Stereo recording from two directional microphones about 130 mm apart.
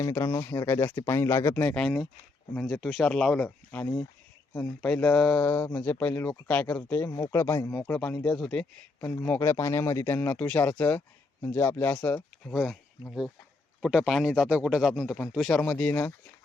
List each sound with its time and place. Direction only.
0.0 s speech: 20° left (ahead or behind)
1.5 s speech: 10° left (ahead or behind)
7.7 s speech: 5° left (ahead or behind)
9.2 s speech: 15° left (ahead or behind); by 15.4 s 5° right (ahead or behind)
15.4 s speech: 10° left (ahead or behind)